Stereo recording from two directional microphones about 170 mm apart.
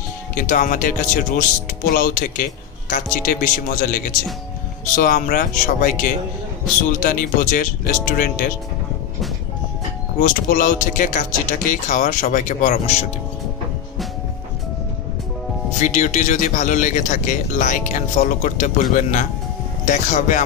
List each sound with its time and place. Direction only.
0.3 s a man's voice: 50° left (ahead or behind)
10.2 s a man's voice: 50° left (ahead or behind)
15.8 s a man's voice: 45° left (ahead or behind)